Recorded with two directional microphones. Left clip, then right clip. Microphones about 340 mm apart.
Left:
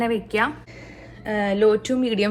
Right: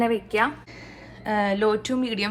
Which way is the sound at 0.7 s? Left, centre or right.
Centre.